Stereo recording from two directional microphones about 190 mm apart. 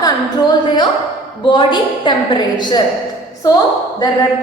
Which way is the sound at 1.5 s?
25° left (ahead or behind).